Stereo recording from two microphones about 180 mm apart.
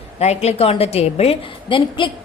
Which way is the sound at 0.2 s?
35° left (ahead or behind).